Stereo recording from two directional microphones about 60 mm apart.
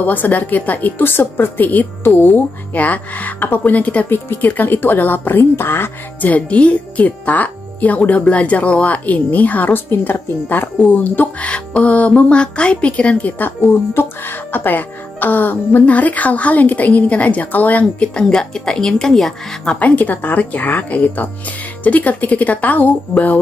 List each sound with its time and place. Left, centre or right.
0.0 s speech: left
6.2 s speech: left
13.4 s a woman's voice: left; by 19.8 s centre
19.8 s speech: left